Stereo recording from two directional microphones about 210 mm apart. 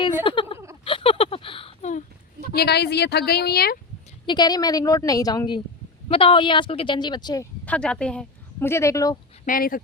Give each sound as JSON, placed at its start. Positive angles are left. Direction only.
{"t": 0.3, "sound": "a sound", "side_deg": 25}
{"t": 2.5, "sound": "speech", "side_deg": 50}
{"t": 4.3, "sound": "a woman's voice", "side_deg": 20}
{"t": 7.6, "sound": "speech", "side_deg": 5}
{"t": 9.5, "sound": "speech", "side_deg": 45}